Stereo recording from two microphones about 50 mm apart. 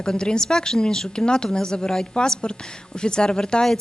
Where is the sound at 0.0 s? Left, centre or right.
Centre.